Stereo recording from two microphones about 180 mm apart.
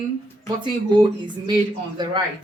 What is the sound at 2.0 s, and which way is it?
Speech, 25° right (ahead or behind).